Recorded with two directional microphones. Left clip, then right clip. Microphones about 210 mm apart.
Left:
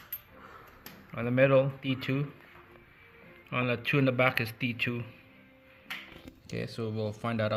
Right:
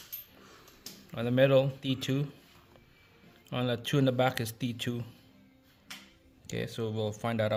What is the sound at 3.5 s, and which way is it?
Speech, 30° right (ahead or behind).